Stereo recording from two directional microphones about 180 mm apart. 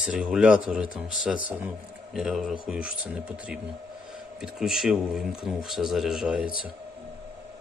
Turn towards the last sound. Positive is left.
turn(degrees=-5)  # may be behind; listen again after turning